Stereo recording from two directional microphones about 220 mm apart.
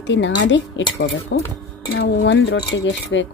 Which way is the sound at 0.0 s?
55° left (ahead or behind).